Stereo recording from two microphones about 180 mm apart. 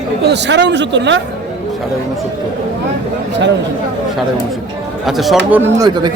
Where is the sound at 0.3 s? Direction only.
75° right (ahead or behind).